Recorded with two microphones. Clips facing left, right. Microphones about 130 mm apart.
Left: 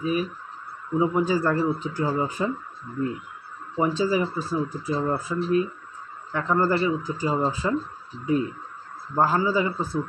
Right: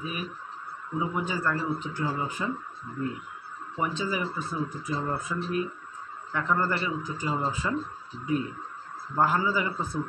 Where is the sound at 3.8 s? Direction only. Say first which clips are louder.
Left 7 dB; 30° left (ahead or behind).